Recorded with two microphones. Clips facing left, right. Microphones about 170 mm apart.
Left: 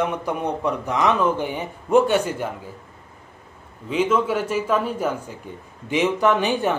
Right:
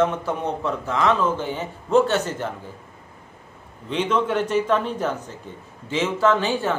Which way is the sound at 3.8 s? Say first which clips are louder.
Left 2 dB; 5° left (ahead or behind).